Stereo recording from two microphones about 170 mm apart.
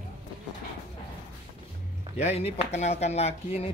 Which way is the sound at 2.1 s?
40° left (ahead or behind).